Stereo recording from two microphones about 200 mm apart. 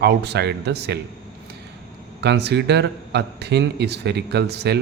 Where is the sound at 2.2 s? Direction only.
55° right (ahead or behind).